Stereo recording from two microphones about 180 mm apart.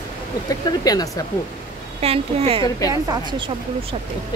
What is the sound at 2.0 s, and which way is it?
Speech, 35° right (ahead or behind).